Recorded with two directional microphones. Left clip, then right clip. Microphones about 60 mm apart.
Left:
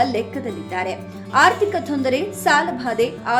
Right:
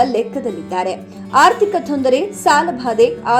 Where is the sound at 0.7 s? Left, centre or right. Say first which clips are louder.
Right 4 dB; right.